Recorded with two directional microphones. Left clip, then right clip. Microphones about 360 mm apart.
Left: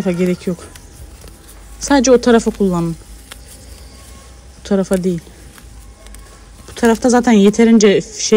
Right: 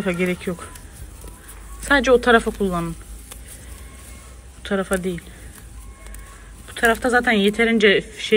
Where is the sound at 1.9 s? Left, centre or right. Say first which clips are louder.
Left 4 dB; centre.